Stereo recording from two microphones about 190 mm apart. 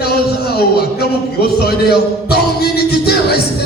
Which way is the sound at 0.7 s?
55° left (ahead or behind).